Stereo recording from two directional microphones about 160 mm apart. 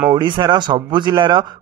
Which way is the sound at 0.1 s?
30° right (ahead or behind).